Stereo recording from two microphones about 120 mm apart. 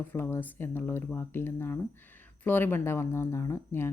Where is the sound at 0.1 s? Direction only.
15° left (ahead or behind).